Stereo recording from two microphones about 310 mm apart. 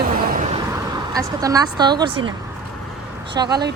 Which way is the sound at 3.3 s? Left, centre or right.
Centre.